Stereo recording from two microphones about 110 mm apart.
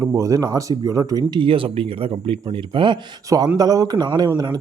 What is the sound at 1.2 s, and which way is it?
Speech, 50° right (ahead or behind).